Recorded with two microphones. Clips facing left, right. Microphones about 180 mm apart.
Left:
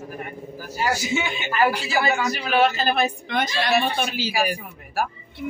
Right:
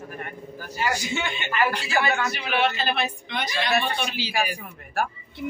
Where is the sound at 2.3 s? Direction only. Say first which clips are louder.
Left 4 dB; 40° left (ahead or behind).